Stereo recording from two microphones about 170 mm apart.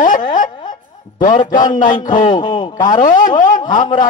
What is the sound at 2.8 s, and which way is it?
A man's voice, 50° left (ahead or behind).